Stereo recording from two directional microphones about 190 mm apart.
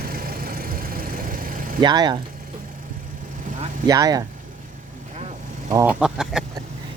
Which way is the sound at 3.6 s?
20° right (ahead or behind).